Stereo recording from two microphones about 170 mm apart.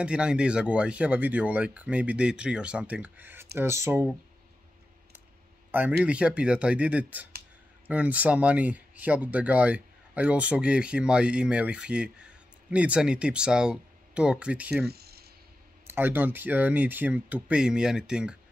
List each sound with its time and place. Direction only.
0.0 s speech: 5° right (ahead or behind)
5.7 s speech: 10° right (ahead or behind)
14.9 s a sound: 70° right (ahead or behind)
15.9 s speech: 10° right (ahead or behind)